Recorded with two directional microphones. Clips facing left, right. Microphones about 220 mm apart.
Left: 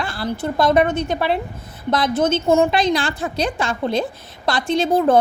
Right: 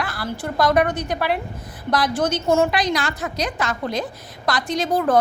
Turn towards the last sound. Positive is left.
turn(degrees=25)  # may be behind; listen again after turning